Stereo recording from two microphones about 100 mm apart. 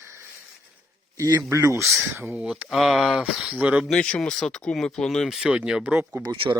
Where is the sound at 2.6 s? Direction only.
Centre (ahead or behind).